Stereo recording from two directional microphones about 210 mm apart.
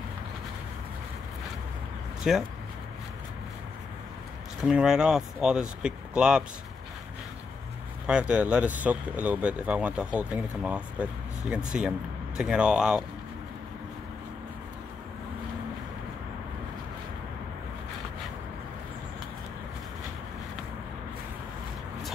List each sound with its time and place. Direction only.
2.3 s speech: centre (ahead or behind)
4.6 s speech: 5° right (ahead or behind)
8.1 s speech: 5° right (ahead or behind)